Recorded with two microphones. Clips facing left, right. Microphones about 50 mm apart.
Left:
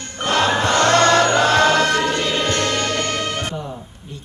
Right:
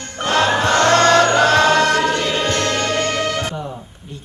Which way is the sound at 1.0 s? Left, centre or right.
Left.